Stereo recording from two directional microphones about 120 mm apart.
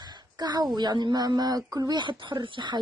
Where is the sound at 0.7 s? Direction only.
40° right (ahead or behind).